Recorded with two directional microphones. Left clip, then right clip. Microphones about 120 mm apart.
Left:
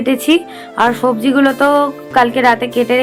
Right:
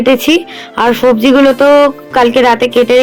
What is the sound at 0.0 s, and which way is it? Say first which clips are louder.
Speech: right 5 dB; 30° right (ahead or behind).